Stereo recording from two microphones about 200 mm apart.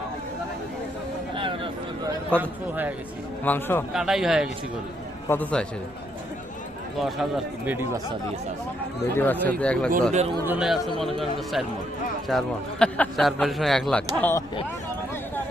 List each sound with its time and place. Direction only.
1.4 s a sound: 25° right (ahead or behind)
2.4 s a man's voice: 10° right (ahead or behind)
3.4 s speech: 10° left (ahead or behind)
3.9 s speech: centre (ahead or behind)
6.9 s speech: centre (ahead or behind)
9.1 s speech: 10° left (ahead or behind)
10.1 s speech: 35° right (ahead or behind)
10.4 s speech: 5° right (ahead or behind); by 14.4 s 10° left (ahead or behind)